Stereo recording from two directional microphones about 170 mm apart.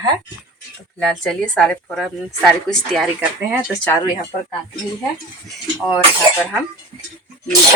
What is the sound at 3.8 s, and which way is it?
Speech, 20° left (ahead or behind).